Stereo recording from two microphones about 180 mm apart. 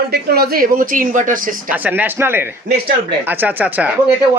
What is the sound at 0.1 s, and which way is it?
Speech, 60° right (ahead or behind).